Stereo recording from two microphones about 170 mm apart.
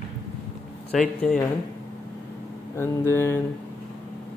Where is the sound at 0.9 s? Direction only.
5° left (ahead or behind).